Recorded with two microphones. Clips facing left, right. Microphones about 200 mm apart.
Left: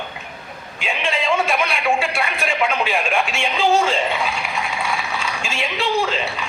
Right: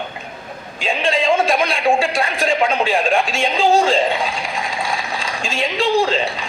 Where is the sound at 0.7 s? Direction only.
35° right (ahead or behind).